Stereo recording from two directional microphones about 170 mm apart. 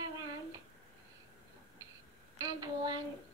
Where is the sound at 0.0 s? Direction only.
25° right (ahead or behind).